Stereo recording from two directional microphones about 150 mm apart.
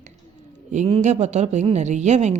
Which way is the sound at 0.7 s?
50° right (ahead or behind).